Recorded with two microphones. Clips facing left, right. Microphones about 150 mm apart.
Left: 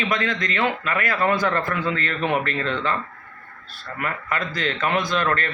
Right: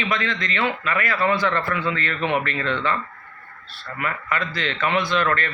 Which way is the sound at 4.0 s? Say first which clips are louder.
Right 1 dB; 45° left (ahead or behind).